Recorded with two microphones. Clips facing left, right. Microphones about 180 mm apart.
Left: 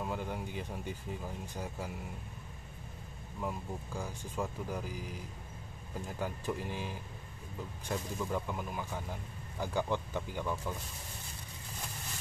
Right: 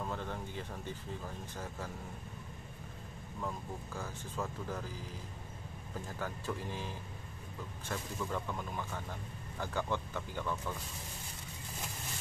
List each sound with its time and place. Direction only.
0.0 s speech: 10° left (ahead or behind)
3.3 s speech: 15° left (ahead or behind)